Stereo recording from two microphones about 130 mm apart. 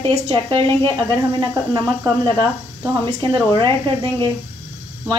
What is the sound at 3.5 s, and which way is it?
Speech, 35° right (ahead or behind).